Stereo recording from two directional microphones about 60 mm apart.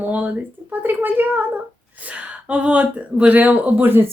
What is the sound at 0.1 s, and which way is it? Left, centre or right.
Speech, right.